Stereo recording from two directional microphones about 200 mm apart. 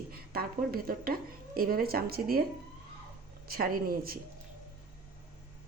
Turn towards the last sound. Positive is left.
turn(degrees=-45)  # may be behind; listen again after turning